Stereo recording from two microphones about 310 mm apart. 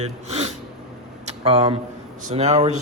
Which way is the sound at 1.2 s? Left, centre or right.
Centre.